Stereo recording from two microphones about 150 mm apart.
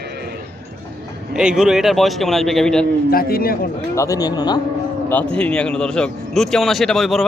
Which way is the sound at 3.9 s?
20° left (ahead or behind).